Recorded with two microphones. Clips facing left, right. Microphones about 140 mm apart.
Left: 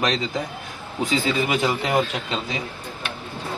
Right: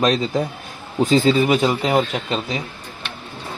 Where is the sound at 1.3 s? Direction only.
25° right (ahead or behind).